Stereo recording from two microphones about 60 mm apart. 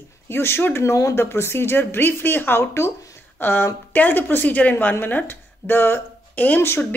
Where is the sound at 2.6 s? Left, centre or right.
Left.